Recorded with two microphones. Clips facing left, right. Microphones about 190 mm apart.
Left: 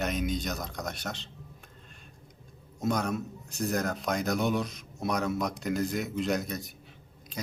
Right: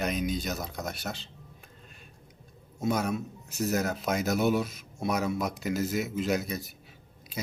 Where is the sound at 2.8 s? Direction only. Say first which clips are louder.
Right 1 dB; 5° right (ahead or behind).